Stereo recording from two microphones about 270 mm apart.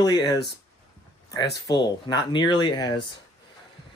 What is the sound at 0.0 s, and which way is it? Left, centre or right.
Speech, centre.